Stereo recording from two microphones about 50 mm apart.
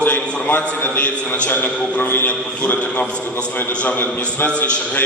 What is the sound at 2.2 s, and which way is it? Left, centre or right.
A man's voice, left.